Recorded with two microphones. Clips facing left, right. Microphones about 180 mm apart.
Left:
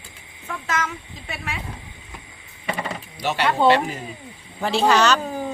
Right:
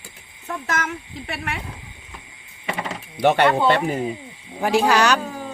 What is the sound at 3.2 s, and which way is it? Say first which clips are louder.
Speech: right 2 dB; 55° right (ahead or behind).